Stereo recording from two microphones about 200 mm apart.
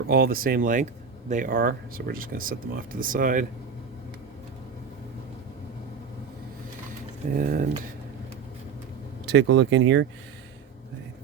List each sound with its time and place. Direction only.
0.1 s speech: 45° right (ahead or behind)
7.3 s speech: 45° right (ahead or behind)
9.2 s speech: 60° right (ahead or behind)